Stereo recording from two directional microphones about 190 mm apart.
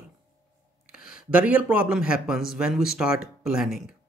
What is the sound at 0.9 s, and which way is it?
A man's voice, 5° right (ahead or behind).